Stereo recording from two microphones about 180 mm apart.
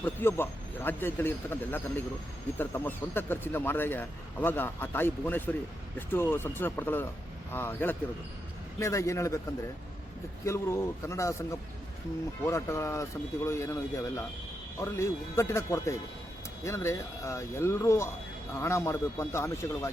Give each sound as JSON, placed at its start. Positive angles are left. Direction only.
{"t": 0.0, "sound": "speech", "side_deg": 10}
{"t": 10.4, "sound": "speech", "side_deg": 15}